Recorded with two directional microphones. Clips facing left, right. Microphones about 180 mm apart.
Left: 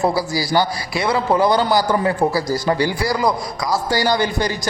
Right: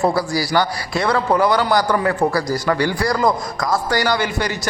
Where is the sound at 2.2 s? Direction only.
10° left (ahead or behind).